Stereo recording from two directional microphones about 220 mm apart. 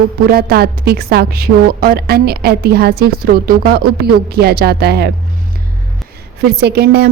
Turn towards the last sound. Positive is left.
turn(degrees=-45)  # may be behind; listen again after turning